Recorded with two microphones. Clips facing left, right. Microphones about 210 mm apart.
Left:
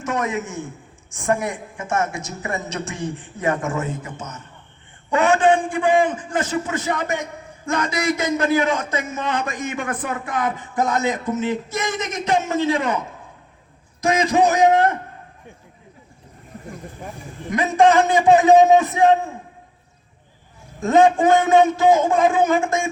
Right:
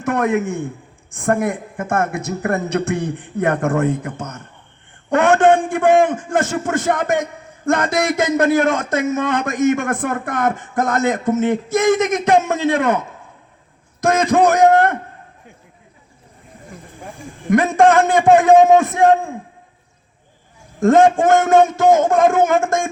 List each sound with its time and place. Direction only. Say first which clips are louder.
0.0 s speech: right 6 dB; 60° right (ahead or behind)
6.1 s a man's voice: right 4 dB; 45° right (ahead or behind)
8.1 s a man's voice: right 5 dB; 70° right (ahead or behind)
8.6 s a man's voice: right 5 dB; 45° right (ahead or behind)
14.0 s a man's voice: right 3 dB; 50° right (ahead or behind)
17.5 s a man's voice: right 3 dB; 50° right (ahead or behind)
20.7 s a man's voice: right 3 dB; 50° right (ahead or behind)